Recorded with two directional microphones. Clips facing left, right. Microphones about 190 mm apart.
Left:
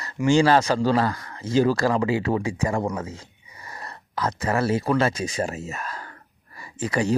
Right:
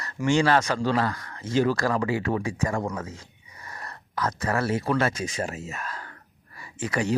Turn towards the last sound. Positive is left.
turn(degrees=35)  # may be behind; listen again after turning